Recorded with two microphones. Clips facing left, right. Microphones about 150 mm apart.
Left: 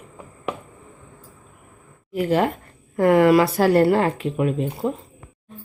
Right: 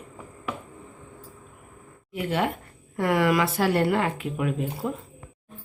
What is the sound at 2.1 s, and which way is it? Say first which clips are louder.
Speech: left 6 dB; 40° left (ahead or behind).